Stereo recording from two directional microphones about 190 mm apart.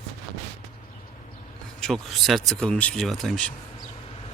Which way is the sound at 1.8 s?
Centre (ahead or behind).